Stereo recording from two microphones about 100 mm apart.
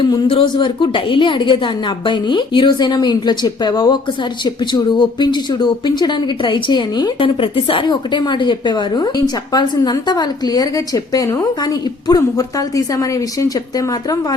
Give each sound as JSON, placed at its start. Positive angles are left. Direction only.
{"t": 0.0, "sound": "speech", "side_deg": 55}